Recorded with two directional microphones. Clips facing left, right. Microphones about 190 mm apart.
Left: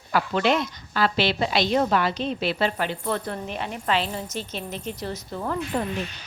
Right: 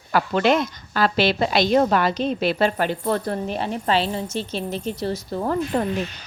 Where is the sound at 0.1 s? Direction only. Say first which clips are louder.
Right 3 dB; 50° right (ahead or behind).